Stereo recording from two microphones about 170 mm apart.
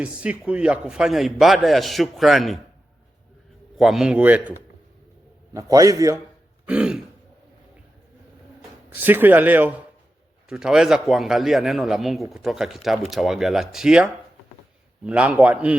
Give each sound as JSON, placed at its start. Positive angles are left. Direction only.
{"t": 0.0, "sound": "speech", "side_deg": -5}
{"t": 3.8, "sound": "speech", "side_deg": 0}
{"t": 5.5, "sound": "a man's voice", "side_deg": -20}
{"t": 6.7, "sound": "speech", "side_deg": -5}
{"t": 8.9, "sound": "speech", "side_deg": -10}